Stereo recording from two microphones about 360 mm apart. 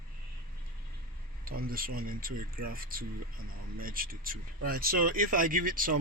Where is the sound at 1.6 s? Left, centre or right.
Right.